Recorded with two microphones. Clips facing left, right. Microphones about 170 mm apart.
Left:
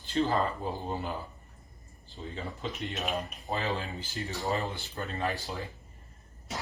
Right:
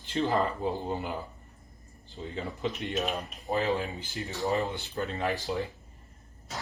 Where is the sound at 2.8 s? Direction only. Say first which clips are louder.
Right 1 dB; centre (ahead or behind).